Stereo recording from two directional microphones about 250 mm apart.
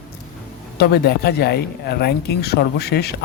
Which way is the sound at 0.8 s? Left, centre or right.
Left.